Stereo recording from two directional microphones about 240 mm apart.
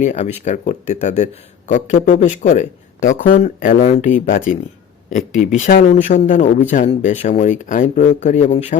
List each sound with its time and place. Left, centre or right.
0.0 s a man's voice: left